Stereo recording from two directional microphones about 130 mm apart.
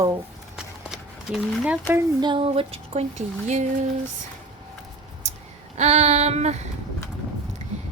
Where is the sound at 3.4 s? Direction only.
65° right (ahead or behind).